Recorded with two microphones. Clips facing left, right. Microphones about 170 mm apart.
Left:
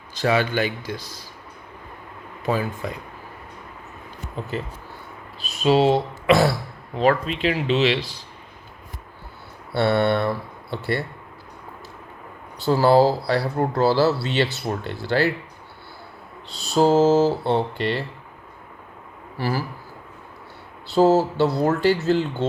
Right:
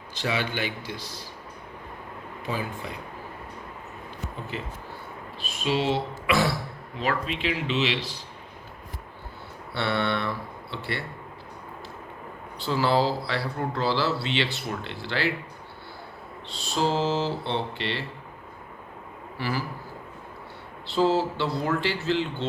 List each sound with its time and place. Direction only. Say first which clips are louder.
0.1 s speech: left 8 dB; 45° left (ahead or behind)
2.8 s speech: left 6 dB; 45° left (ahead or behind)
4.5 s speech: left 5 dB; 40° left (ahead or behind)
9.7 s speech: left 7 dB; 40° left (ahead or behind)
12.6 s speech: left 7 dB; 40° left (ahead or behind)
16.7 s speech: left 9 dB; 45° left (ahead or behind)
19.4 s speech: left 5 dB; 40° left (ahead or behind)
20.9 s speech: left 6 dB; 40° left (ahead or behind)